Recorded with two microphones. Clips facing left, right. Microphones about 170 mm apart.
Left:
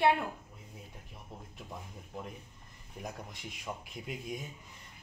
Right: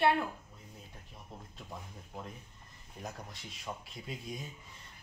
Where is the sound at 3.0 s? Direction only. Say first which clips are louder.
Left 1 dB; 15° left (ahead or behind).